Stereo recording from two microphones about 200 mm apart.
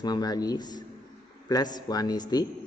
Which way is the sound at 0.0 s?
20° left (ahead or behind).